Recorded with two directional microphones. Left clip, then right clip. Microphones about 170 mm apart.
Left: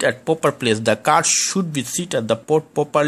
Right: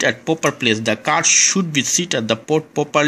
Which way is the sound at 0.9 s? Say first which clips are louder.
Left 2 dB; 15° left (ahead or behind).